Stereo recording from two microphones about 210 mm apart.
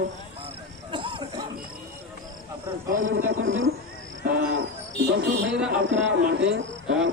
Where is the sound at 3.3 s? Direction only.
65° right (ahead or behind).